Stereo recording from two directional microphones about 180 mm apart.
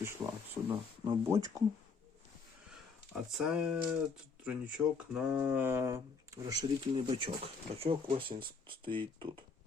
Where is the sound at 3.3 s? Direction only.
5° right (ahead or behind).